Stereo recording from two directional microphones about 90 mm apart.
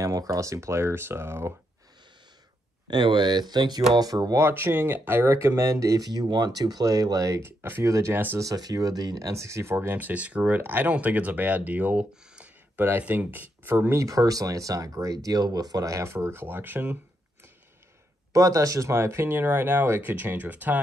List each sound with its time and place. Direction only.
0.0 s speech: 40° right (ahead or behind)
2.9 s speech: 60° right (ahead or behind)
4.4 s speech: 25° right (ahead or behind)
8.4 s speech: 45° right (ahead or behind); by 17.0 s 20° right (ahead or behind)
18.3 s speech: 40° right (ahead or behind); by 20.8 s 20° right (ahead or behind)